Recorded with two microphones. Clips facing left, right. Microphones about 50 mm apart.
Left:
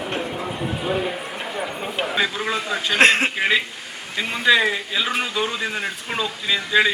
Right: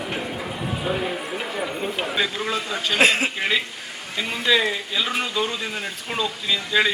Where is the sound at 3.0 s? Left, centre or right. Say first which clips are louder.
Left 3 dB; left.